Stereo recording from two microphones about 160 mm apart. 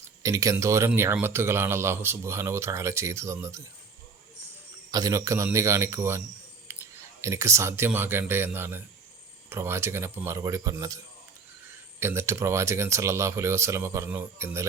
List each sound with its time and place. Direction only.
0.2 s a man's voice: 20° right (ahead or behind)
4.9 s a man's voice: 25° right (ahead or behind)
6.7 s a sound: 15° right (ahead or behind)
7.2 s a man's voice: 20° right (ahead or behind)